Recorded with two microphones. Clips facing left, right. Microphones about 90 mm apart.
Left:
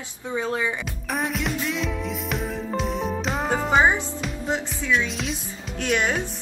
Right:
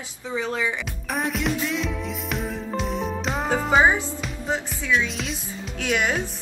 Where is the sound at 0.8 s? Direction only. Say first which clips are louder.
Even; centre (ahead or behind).